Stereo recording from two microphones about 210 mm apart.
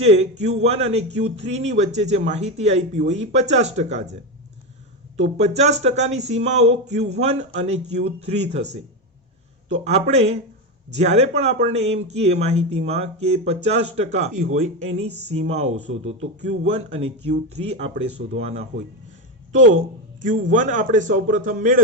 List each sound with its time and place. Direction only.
0.0 s speech: 30° right (ahead or behind)
20.2 s speech: 40° right (ahead or behind)